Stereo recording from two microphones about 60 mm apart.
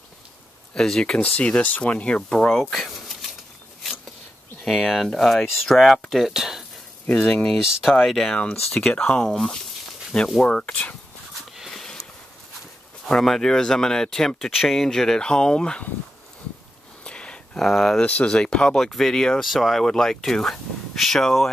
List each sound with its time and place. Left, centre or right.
0.7 s speech: centre
2.5 s speech: centre
4.6 s speech: centre
7.6 s speech: centre
8.0 s speech: centre
8.7 s speech: left
10.6 s speech: left
11.7 s sniff: centre
13.0 s speech: centre
17.0 s a sound: centre
17.6 s speech: centre
18.0 s speech: left
18.8 s speech: centre